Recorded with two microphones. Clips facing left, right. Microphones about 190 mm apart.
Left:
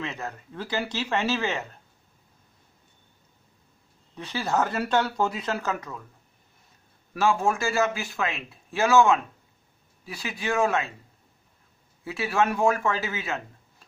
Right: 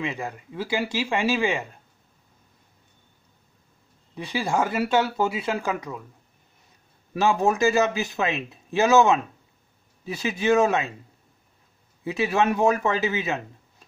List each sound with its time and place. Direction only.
0.0 s speech: 10° right (ahead or behind)
4.1 s speech: 15° right (ahead or behind)
7.2 s speech: 20° right (ahead or behind)
12.0 s speech: 20° right (ahead or behind)